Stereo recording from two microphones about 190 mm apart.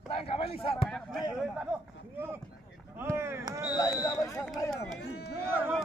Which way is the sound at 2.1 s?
10° right (ahead or behind).